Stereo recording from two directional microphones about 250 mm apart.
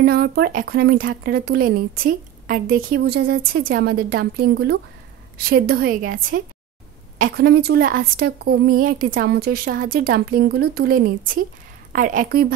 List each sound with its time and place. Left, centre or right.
0.0 s speech: right